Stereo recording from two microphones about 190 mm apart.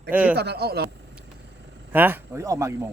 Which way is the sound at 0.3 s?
60° right (ahead or behind).